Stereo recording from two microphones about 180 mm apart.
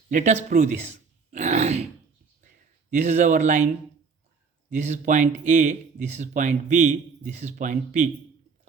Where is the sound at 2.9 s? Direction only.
40° right (ahead or behind).